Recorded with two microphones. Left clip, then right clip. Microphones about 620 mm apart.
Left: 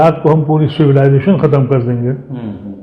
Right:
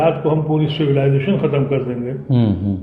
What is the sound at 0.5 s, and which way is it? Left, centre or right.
A man's voice, left.